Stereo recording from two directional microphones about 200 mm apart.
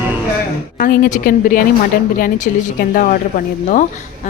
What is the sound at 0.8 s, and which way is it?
A woman's voice, 45° left (ahead or behind).